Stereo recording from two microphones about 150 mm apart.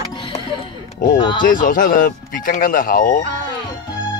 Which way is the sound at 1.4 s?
65° left (ahead or behind).